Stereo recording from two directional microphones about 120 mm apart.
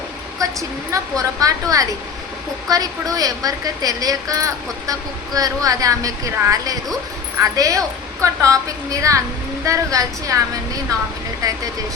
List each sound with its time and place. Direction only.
0.9 s a woman's voice: 30° right (ahead or behind)
11.4 s a woman's voice: 30° right (ahead or behind)